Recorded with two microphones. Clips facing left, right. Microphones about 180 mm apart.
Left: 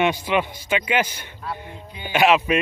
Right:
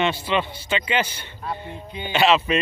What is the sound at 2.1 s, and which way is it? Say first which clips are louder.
Speech: left 1 dB; 10° left (ahead or behind).